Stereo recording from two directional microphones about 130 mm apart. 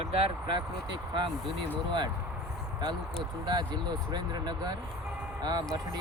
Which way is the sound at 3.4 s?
35° right (ahead or behind).